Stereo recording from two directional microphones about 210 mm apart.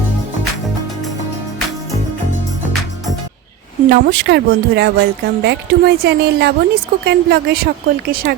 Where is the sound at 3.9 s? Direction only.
50° right (ahead or behind).